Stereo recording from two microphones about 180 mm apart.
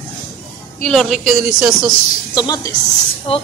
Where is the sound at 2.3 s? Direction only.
20° left (ahead or behind).